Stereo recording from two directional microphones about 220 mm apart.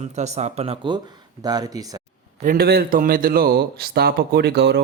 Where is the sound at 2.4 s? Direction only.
40° right (ahead or behind).